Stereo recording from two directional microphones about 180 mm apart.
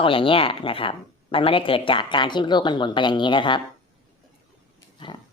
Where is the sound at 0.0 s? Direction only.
30° left (ahead or behind).